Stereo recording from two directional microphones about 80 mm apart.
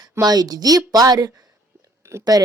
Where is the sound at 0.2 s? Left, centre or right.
Right.